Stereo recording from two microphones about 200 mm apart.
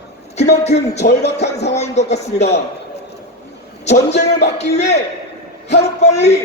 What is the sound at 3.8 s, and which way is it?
A man's voice, 35° left (ahead or behind).